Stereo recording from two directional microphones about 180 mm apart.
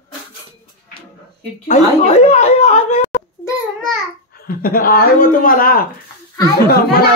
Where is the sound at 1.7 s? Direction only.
35° left (ahead or behind).